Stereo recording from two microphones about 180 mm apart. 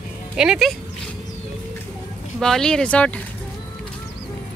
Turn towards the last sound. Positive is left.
turn(degrees=5)  # may be behind; listen again after turning